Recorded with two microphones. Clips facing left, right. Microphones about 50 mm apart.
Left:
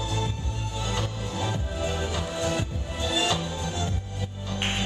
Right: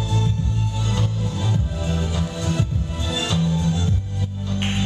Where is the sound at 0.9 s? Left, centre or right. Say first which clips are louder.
Right 4 dB; centre.